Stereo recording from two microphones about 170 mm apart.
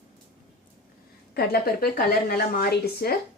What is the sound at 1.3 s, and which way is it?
Speech, 65° left (ahead or behind).